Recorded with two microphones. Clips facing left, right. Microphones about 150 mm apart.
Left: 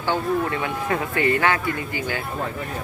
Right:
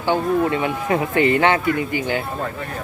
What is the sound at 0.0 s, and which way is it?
Speech, 20° right (ahead or behind).